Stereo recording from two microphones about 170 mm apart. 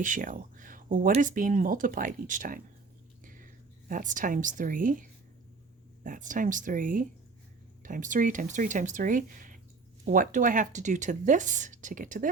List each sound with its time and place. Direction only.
0.0 s a woman's voice: 50° right (ahead or behind)